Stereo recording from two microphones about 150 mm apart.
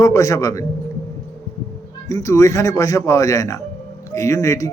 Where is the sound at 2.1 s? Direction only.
20° left (ahead or behind).